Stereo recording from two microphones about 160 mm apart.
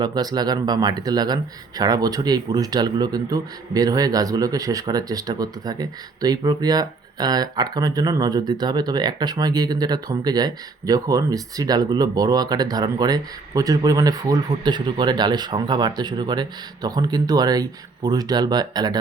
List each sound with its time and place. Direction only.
0.0 s speech: 25° right (ahead or behind)